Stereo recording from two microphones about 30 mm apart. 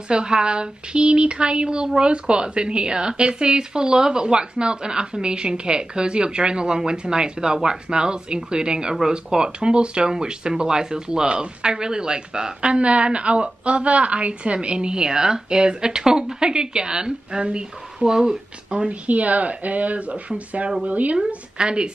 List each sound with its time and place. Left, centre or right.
0.1 s speech: right
19.0 s speech: right
21.5 s speech: right